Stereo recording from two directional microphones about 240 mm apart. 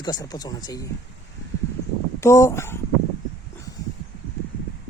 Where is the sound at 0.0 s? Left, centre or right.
Centre.